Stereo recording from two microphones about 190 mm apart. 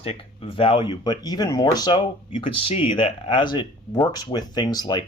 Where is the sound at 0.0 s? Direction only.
30° left (ahead or behind).